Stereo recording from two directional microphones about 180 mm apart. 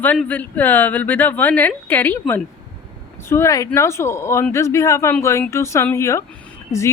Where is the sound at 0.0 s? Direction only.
10° left (ahead or behind).